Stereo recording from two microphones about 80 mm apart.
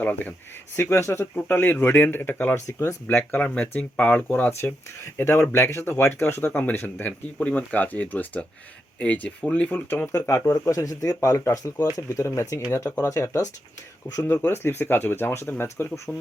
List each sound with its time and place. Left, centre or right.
0.0 s speech: left
1.4 s speech: left
10.2 s speech: left
14.3 s speech: left